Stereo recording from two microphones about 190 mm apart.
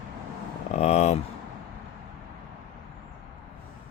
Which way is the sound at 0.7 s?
35° left (ahead or behind).